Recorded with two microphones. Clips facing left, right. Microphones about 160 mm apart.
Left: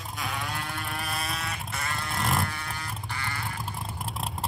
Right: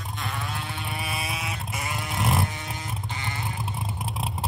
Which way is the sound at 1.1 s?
5° right (ahead or behind).